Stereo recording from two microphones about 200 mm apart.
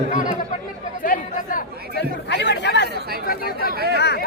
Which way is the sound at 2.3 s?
60° left (ahead or behind).